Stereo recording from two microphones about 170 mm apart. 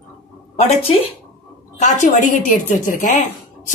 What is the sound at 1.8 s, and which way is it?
A woman's voice, 45° left (ahead or behind).